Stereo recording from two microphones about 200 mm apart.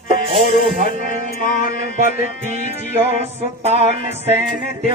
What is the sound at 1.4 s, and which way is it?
Mantra, 45° left (ahead or behind).